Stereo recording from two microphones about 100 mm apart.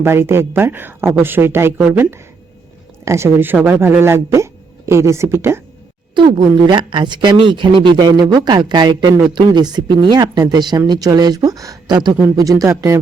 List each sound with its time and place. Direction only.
0.0 s speech: 25° right (ahead or behind)
6.1 s speech: 50° right (ahead or behind); by 13.0 s 30° right (ahead or behind)